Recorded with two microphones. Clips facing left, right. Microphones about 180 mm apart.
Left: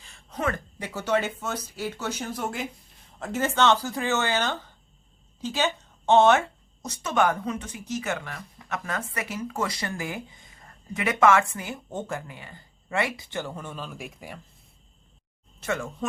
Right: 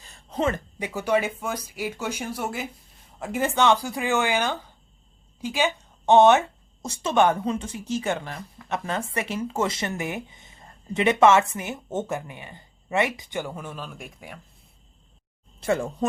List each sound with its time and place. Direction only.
0.0 s a sound: 40° right (ahead or behind)
0.3 s a woman's voice: 25° right (ahead or behind); by 14.3 s centre (ahead or behind)
15.6 s speech: 35° right (ahead or behind)